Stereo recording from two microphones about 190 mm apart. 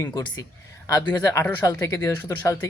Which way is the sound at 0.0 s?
20° left (ahead or behind).